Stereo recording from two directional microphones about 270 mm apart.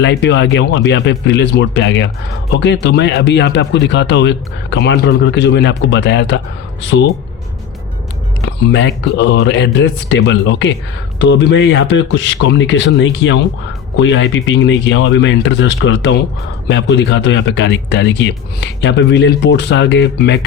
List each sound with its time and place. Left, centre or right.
0.0 s speech: left
8.4 s a man's voice: left